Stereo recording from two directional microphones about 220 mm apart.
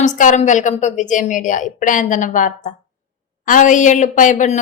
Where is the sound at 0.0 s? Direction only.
35° left (ahead or behind).